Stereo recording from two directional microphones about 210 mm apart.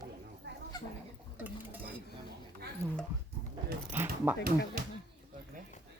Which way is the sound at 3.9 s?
10° right (ahead or behind).